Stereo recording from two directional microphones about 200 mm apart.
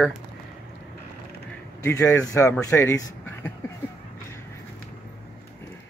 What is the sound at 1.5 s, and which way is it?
A man's voice, 15° left (ahead or behind).